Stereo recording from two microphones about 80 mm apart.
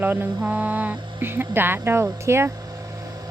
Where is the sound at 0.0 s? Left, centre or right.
Right.